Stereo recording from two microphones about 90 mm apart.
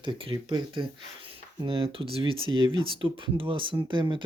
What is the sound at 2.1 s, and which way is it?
Speech, 75° right (ahead or behind).